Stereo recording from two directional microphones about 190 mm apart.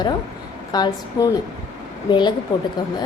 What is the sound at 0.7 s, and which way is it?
Speech, 20° left (ahead or behind).